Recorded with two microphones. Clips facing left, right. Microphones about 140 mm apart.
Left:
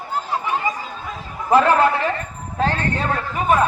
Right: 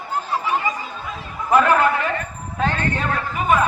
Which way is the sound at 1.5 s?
30° left (ahead or behind).